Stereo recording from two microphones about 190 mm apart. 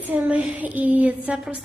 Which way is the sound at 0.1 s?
5° right (ahead or behind).